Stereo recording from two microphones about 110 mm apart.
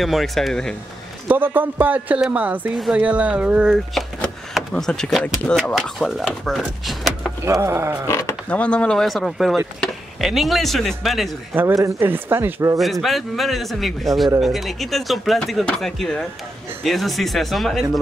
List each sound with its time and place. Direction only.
0.0 s speech: centre (ahead or behind)
1.3 s speech: 15° right (ahead or behind)
4.6 s speech: 5° left (ahead or behind)
7.6 s speech: 25° right (ahead or behind)
8.1 s a sound: 25° left (ahead or behind)
8.5 s speech: 10° left (ahead or behind)
11.5 s speech: 25° right (ahead or behind)
12.7 s speech: centre (ahead or behind)